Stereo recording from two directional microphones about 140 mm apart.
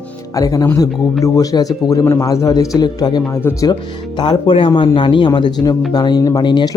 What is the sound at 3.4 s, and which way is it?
Speech, 15° left (ahead or behind).